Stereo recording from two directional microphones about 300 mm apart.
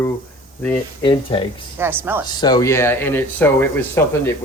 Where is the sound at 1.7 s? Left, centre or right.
Centre.